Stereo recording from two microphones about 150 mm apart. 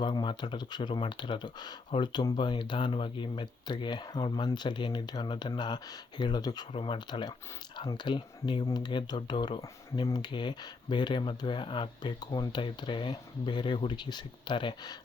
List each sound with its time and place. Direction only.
0.0 s speech: 30° left (ahead or behind)